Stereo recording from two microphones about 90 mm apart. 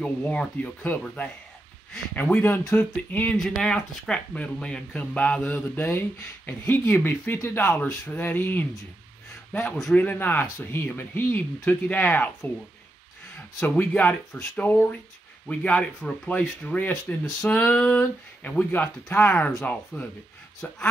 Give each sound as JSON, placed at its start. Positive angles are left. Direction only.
{"t": 0.0, "sound": "speech", "side_deg": 10}
{"t": 3.3, "sound": "a man's voice", "side_deg": 5}
{"t": 13.6, "sound": "speech", "side_deg": 20}